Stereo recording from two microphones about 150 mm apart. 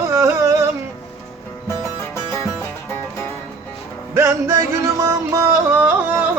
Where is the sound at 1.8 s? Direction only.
20° left (ahead or behind).